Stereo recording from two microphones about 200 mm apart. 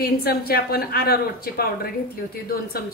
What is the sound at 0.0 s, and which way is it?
A woman's voice, 50° left (ahead or behind).